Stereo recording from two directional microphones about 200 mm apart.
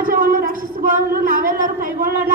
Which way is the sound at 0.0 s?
45° right (ahead or behind).